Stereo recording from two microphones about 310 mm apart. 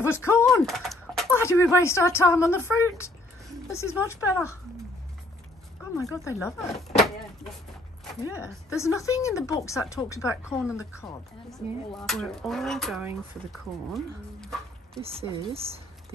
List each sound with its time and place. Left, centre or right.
0.0 s speech: centre
5.9 s speech: centre
8.2 s speech: centre
10.6 s speech: centre
15.0 s speech: centre